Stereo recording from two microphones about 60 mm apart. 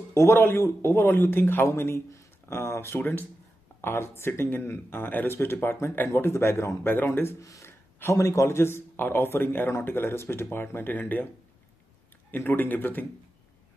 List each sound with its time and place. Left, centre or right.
0.1 s speech: left
3.0 s speech: left
3.8 s speech: left
12.3 s speech: left